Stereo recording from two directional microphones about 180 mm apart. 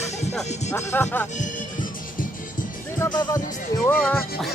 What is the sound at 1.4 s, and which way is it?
Music, 50° left (ahead or behind).